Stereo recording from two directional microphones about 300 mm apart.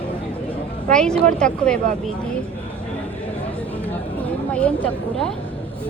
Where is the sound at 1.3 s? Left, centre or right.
Centre.